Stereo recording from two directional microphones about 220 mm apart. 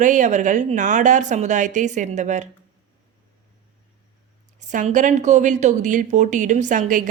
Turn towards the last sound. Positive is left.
turn(degrees=-35)  # may be behind; listen again after turning